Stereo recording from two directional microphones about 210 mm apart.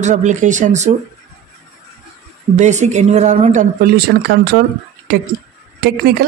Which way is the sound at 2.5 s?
35° right (ahead or behind).